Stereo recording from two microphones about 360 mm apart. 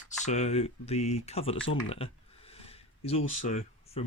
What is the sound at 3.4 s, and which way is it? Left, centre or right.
Speech, centre.